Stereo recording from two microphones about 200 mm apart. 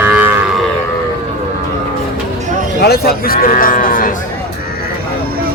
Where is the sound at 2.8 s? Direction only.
50° left (ahead or behind).